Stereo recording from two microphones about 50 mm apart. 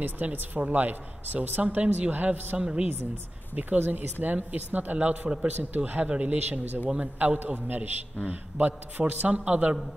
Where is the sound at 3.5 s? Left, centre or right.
Right.